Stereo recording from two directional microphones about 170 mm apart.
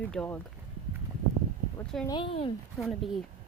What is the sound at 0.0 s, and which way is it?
Speech, 5° left (ahead or behind).